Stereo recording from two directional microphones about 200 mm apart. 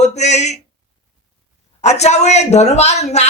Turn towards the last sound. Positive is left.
turn(degrees=35)  # may be behind; listen again after turning